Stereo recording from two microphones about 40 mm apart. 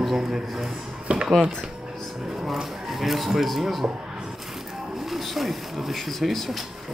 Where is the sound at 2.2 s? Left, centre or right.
Centre.